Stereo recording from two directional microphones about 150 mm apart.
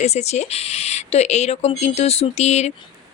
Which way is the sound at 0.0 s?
45° left (ahead or behind).